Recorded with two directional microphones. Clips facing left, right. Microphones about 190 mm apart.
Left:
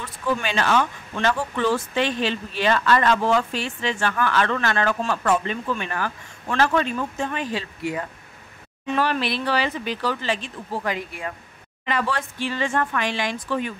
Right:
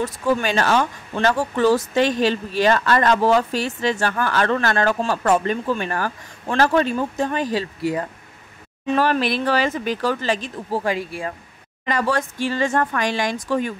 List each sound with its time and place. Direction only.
0.0 s speech: 40° right (ahead or behind)
11.8 s speech: 40° right (ahead or behind)